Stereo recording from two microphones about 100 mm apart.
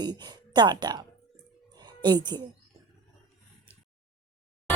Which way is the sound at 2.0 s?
45° right (ahead or behind).